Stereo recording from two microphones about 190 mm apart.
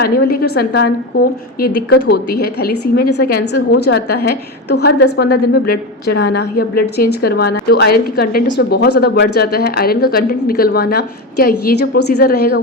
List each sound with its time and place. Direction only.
0.0 s a woman's voice: 55° left (ahead or behind)